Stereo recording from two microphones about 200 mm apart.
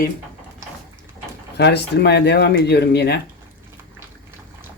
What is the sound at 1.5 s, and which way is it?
Speech, 55° left (ahead or behind).